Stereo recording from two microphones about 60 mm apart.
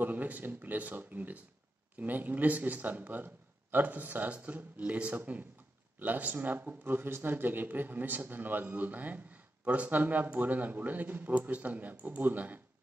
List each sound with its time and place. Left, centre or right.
0.0 s speech: right